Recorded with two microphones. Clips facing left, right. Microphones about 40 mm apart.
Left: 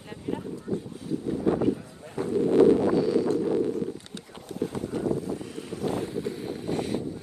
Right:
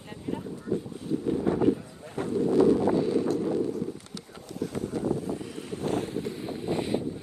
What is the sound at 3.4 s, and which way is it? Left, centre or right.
Wind, left.